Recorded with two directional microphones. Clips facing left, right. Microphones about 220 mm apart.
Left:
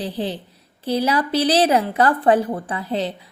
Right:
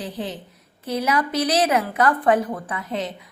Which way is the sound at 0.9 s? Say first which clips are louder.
Left 3 dB; 30° left (ahead or behind).